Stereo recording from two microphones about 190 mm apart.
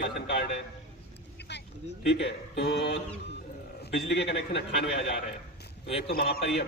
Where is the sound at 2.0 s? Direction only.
65° left (ahead or behind).